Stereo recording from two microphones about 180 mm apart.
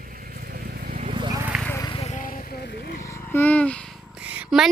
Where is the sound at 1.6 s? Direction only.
15° left (ahead or behind).